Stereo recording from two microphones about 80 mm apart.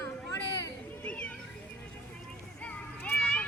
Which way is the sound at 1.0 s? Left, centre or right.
Centre.